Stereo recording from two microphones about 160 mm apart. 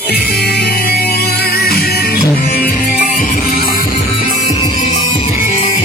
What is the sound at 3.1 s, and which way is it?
Music, 60° left (ahead or behind).